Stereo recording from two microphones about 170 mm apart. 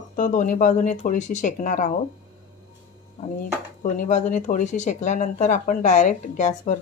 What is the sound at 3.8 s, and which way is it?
Speech, 50° left (ahead or behind).